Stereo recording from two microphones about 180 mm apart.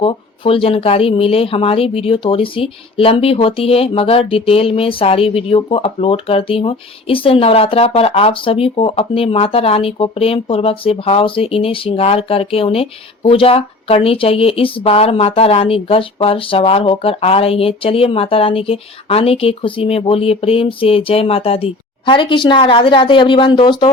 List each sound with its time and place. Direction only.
0.0 s speech: 30° left (ahead or behind)